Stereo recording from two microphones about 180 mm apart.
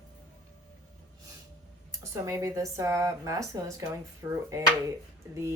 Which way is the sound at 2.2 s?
15° right (ahead or behind).